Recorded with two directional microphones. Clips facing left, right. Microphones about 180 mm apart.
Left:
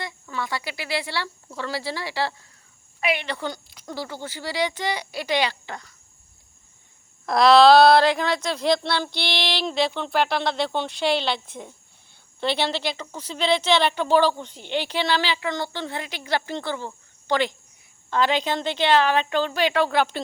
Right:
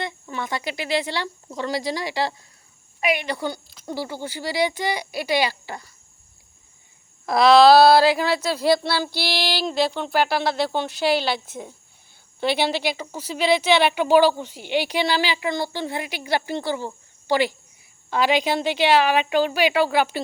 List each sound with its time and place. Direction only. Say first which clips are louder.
0.0 s a woman's voice: right 2 dB; 20° right (ahead or behind)
7.3 s a woman's voice: right 1 dB; centre (ahead or behind)